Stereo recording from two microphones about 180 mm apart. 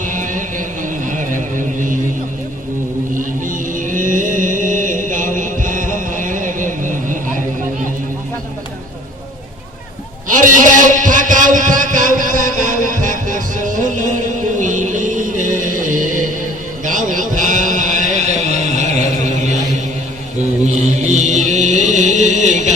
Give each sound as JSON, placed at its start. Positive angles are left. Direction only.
{"t": 0.0, "sound": "music", "side_deg": -45}
{"t": 3.2, "sound": "chant", "side_deg": -45}
{"t": 10.2, "sound": "a sound", "side_deg": -45}
{"t": 14.6, "sound": "music", "side_deg": -45}
{"t": 16.8, "sound": "a sound", "side_deg": -45}
{"t": 20.7, "sound": "mantra", "side_deg": -40}